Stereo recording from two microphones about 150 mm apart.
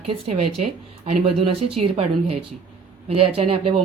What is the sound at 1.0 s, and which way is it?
Speech, 45° right (ahead or behind).